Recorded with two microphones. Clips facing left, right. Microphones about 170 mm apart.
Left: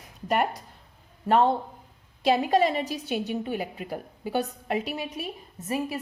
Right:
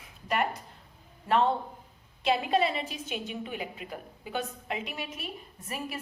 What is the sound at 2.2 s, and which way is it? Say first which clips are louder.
A woman's voice: left 4 dB; 40° left (ahead or behind).